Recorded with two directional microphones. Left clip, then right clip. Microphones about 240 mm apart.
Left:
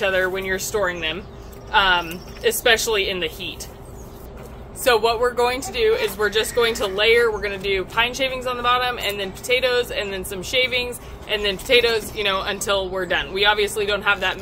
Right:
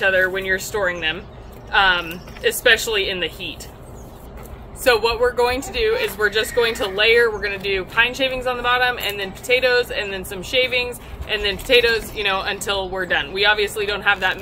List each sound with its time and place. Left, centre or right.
0.0 s speech: centre
4.8 s speech: centre